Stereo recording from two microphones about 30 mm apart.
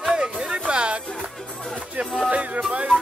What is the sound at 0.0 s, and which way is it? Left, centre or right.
Music, right.